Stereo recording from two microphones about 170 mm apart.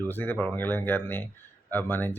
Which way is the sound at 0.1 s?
10° left (ahead or behind).